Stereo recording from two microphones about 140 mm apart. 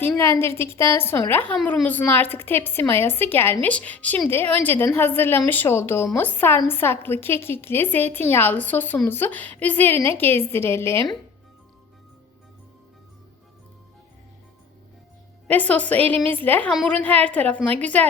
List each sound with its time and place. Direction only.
0.2 s a woman's voice: 20° left (ahead or behind)
15.4 s a woman's voice: 10° left (ahead or behind)